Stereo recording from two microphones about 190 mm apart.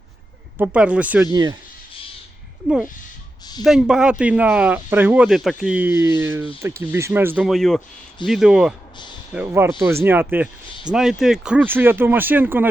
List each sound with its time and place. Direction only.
0.6 s speech: 5° right (ahead or behind)
1.3 s speech: 20° right (ahead or behind)
3.6 s speech: centre (ahead or behind)